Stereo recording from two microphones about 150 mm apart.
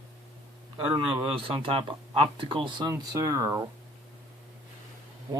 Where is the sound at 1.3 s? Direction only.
35° right (ahead or behind).